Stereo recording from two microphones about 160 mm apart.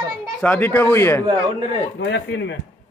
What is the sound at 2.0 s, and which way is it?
Speech, 90° left.